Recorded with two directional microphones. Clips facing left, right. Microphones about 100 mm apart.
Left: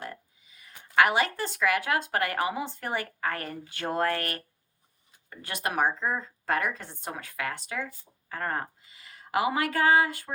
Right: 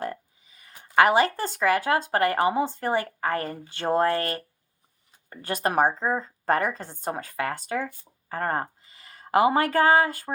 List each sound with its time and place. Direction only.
0.6 s speech: 40° right (ahead or behind)
5.3 s a woman's voice: 40° right (ahead or behind)